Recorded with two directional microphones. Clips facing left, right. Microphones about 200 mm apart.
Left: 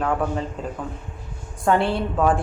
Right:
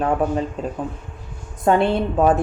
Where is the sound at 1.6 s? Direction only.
20° right (ahead or behind).